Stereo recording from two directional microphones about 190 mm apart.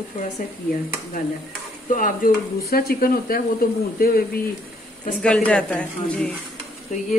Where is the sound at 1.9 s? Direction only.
45° left (ahead or behind).